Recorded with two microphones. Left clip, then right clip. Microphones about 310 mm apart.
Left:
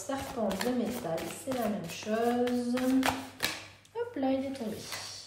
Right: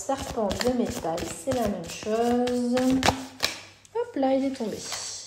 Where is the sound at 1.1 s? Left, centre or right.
Right.